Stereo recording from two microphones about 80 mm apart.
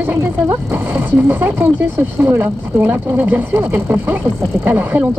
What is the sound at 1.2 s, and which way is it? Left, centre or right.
Speech, right.